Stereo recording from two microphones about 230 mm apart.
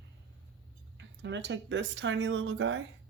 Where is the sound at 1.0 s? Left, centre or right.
Right.